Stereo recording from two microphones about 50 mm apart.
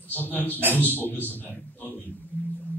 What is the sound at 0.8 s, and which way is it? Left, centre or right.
Speech, left.